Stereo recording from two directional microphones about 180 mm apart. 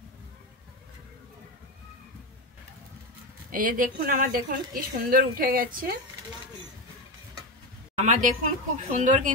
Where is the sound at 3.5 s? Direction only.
50° right (ahead or behind).